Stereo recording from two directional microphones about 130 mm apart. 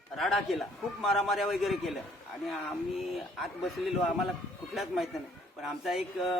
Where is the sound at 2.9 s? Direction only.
Centre (ahead or behind).